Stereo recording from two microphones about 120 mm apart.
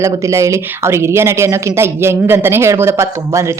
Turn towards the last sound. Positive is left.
turn(degrees=-25)  # may be behind; listen again after turning